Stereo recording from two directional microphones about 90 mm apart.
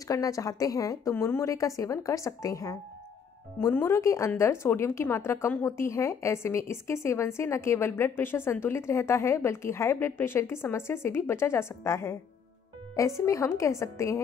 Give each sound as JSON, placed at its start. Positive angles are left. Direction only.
{"t": 0.1, "sound": "speech", "side_deg": 40}
{"t": 1.1, "sound": "a woman's voice", "side_deg": 30}